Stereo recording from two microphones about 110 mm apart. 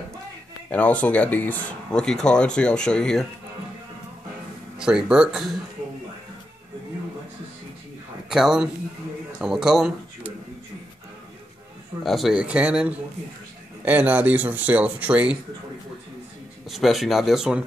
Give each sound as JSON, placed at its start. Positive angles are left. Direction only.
{"t": 0.7, "sound": "speech", "side_deg": 10}
{"t": 4.7, "sound": "speech", "side_deg": -5}
{"t": 8.3, "sound": "speech", "side_deg": -5}
{"t": 12.0, "sound": "speech", "side_deg": 0}
{"t": 16.6, "sound": "speech", "side_deg": 0}